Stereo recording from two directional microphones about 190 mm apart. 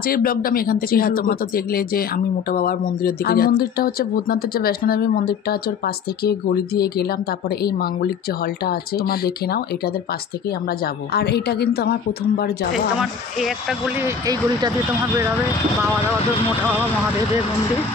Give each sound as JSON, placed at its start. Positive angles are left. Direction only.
{"t": 0.1, "sound": "a woman's voice", "side_deg": 50}
{"t": 8.6, "sound": "speech", "side_deg": 55}
{"t": 11.1, "sound": "a woman's voice", "side_deg": 60}
{"t": 12.7, "sound": "speech", "side_deg": 0}
{"t": 14.0, "sound": "speech", "side_deg": -20}